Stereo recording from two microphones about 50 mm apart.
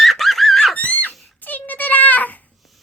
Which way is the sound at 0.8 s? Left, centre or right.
Left.